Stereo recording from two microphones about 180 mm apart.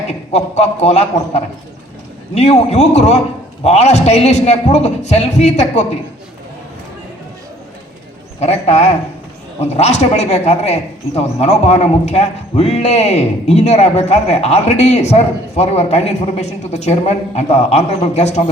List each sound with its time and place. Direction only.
0.3 s a man's voice: 35° left (ahead or behind)
8.4 s a man's voice: 35° left (ahead or behind)